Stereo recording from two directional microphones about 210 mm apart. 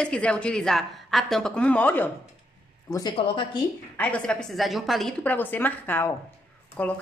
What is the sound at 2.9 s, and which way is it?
Speech, 20° left (ahead or behind).